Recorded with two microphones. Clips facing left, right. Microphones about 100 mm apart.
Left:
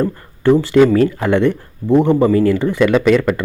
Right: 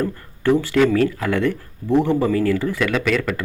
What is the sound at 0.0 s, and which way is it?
Speech, 20° left (ahead or behind).